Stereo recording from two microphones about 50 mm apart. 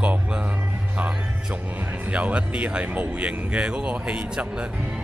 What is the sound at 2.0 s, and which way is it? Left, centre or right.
Speech, right.